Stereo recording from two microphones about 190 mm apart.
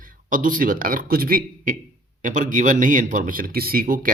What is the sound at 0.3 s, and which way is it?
Speech, 45° right (ahead or behind).